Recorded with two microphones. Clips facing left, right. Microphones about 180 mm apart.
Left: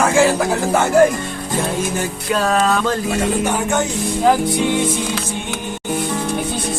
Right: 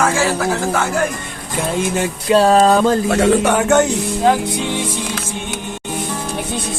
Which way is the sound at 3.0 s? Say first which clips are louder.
Right 5 dB; 75° right (ahead or behind).